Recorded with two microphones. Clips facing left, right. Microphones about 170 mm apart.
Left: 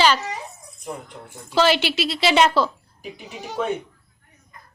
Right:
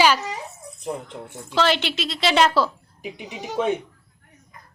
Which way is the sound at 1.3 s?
5° left (ahead or behind).